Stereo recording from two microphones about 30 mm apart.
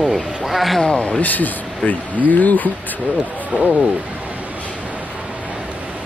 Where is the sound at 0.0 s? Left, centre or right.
Centre.